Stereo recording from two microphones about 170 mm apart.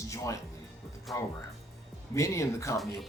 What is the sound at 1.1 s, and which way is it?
Speech, centre (ahead or behind).